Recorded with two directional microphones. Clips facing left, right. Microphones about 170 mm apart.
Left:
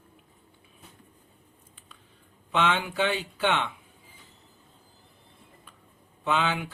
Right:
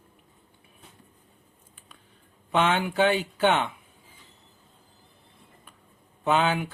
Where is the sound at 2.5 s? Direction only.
50° right (ahead or behind).